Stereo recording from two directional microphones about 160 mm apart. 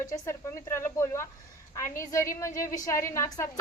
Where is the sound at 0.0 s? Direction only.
20° left (ahead or behind).